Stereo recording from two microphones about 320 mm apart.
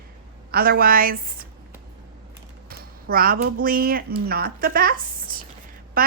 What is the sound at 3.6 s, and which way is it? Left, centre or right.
Speech, right.